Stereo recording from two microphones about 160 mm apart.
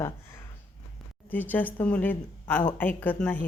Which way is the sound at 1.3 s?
10° left (ahead or behind).